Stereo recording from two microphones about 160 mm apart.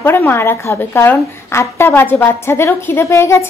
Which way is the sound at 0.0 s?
15° left (ahead or behind).